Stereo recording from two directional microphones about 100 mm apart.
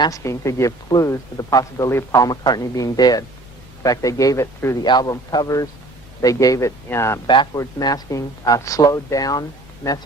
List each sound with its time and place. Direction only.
0.0 s speech: 30° left (ahead or behind)
4.9 s speech: 45° left (ahead or behind); by 7.2 s 25° left (ahead or behind)
7.5 s speech: 40° left (ahead or behind)